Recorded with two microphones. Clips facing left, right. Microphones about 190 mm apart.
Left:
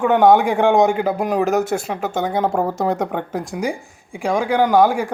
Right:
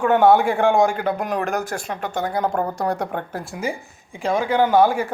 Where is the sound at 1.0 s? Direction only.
5° left (ahead or behind).